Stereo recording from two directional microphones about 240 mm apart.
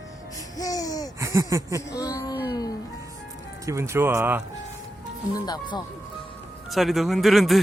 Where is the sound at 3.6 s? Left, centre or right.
Centre.